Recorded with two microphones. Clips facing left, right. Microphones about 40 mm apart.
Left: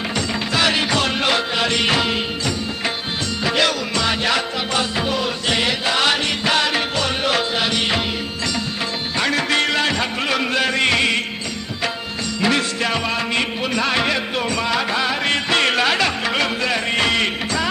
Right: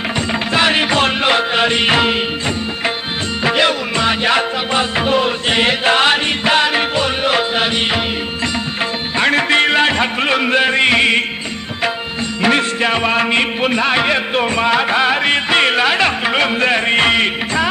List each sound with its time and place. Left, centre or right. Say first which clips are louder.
0.5 s music: right 4 dB; right
3.4 s music: right 4 dB; right
9.1 s music: right 6 dB; right
12.4 s music: right 5 dB; right
16.6 s music: right 6 dB; right